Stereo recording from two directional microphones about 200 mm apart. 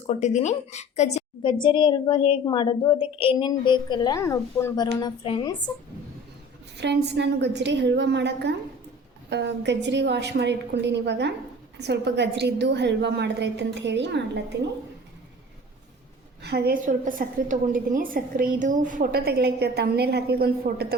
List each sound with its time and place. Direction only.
0.1 s a woman's voice: 35° left (ahead or behind)
6.7 s a woman's voice: 60° right (ahead or behind)
16.4 s a woman's voice: 55° right (ahead or behind)